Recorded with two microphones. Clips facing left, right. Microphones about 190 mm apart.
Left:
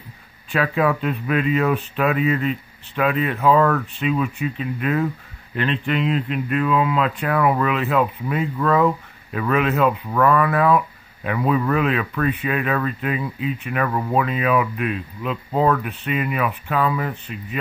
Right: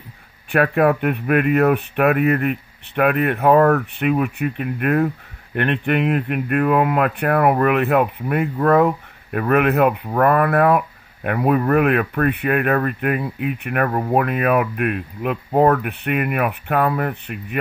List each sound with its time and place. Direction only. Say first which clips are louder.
0.5 s speech: right 4 dB; 60° right (ahead or behind)
13.8 s speech: right 2 dB; 40° right (ahead or behind)
14.1 s speech: right 2 dB; 60° right (ahead or behind)